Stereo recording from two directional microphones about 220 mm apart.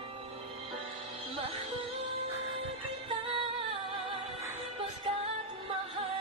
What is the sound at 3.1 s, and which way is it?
Music, 20° right (ahead or behind).